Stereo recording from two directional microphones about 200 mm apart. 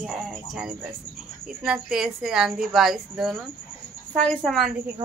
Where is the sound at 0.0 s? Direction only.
Centre (ahead or behind).